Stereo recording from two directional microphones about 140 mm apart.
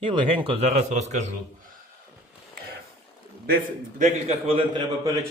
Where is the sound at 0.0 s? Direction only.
40° right (ahead or behind).